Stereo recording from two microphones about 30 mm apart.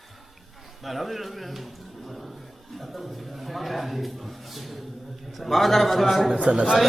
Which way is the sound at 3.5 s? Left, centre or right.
Centre.